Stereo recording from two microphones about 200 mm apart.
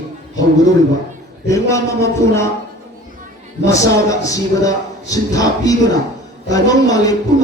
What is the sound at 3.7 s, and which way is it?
A man's voice, 15° left (ahead or behind).